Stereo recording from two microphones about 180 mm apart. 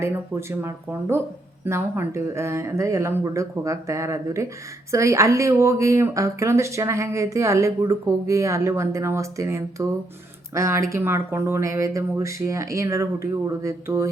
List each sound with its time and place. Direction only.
0.0 s a woman's voice: 15° right (ahead or behind)